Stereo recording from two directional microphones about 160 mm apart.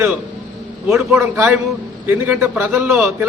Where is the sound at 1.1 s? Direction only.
15° right (ahead or behind).